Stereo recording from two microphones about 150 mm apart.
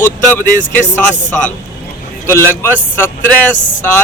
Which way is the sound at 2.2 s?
15° left (ahead or behind).